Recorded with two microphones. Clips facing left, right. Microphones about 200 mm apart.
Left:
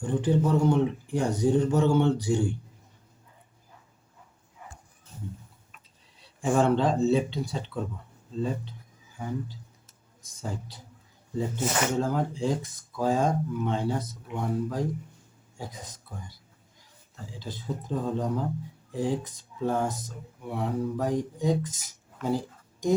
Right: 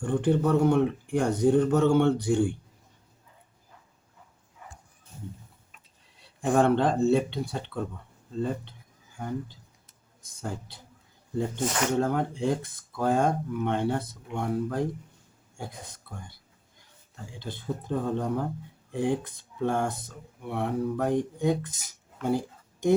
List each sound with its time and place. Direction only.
0.0 s speech: 55° right (ahead or behind)
6.4 s speech: 60° right (ahead or behind)
11.5 s speech: 5° left (ahead or behind)
11.9 s speech: 60° right (ahead or behind)
17.4 s speech: 55° right (ahead or behind)